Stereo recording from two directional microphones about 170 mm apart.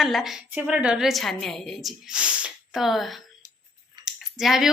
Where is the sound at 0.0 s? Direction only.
Centre (ahead or behind).